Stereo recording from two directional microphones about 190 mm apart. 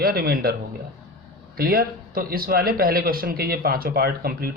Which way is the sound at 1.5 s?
50° right (ahead or behind).